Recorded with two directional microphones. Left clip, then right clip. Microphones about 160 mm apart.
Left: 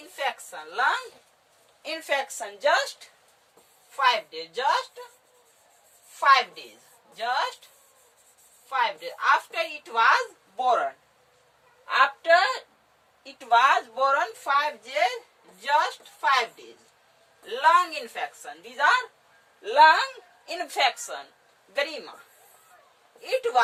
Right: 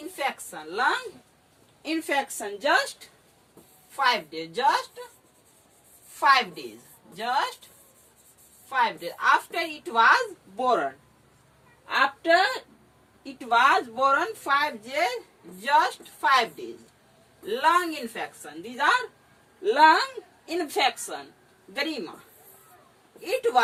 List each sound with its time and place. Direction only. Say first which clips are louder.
0.2 s a sound: even; 20° left (ahead or behind)
1.8 s a woman's voice: right 1 dB; 25° left (ahead or behind)
3.9 s a woman's voice: left 1 dB; 5° left (ahead or behind)
6.1 s a woman's voice: left 1 dB; 5° left (ahead or behind)
8.7 s a woman's voice: right 1 dB; 5° left (ahead or behind)
10.6 s a woman's voice: left 1 dB; 20° left (ahead or behind)
14.1 s a woman's voice: even; 15° left (ahead or behind)
20.4 s a woman's voice: even; 30° left (ahead or behind)
21.8 s a woman's voice: left 1 dB; 15° left (ahead or behind)